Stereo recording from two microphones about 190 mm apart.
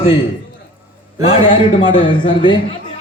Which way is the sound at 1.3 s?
25° left (ahead or behind).